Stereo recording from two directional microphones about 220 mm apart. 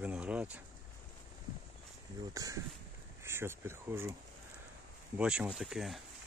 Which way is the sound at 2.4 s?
15° right (ahead or behind).